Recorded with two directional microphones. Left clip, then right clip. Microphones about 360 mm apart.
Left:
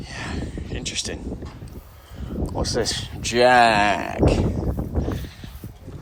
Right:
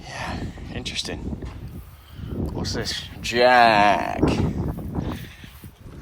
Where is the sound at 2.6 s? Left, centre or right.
Centre.